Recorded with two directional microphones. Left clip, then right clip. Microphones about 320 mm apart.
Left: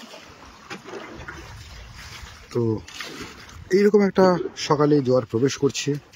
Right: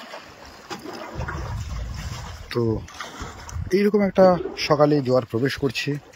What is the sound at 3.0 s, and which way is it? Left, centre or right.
Boat, centre.